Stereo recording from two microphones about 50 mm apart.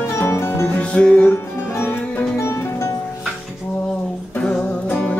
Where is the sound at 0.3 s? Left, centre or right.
Left.